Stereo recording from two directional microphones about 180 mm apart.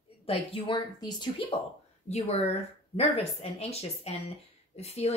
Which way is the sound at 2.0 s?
35° left (ahead or behind).